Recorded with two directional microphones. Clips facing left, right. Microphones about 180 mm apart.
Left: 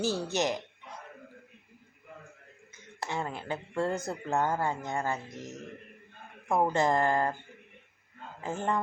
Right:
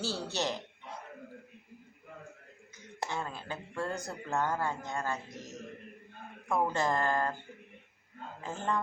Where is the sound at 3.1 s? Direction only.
20° left (ahead or behind).